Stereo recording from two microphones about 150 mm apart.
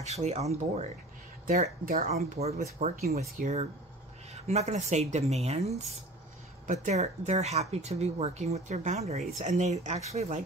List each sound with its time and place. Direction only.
0.0 s speech: 45° right (ahead or behind)
1.9 s speech: 65° right (ahead or behind)
2.1 s speech: 45° right (ahead or behind)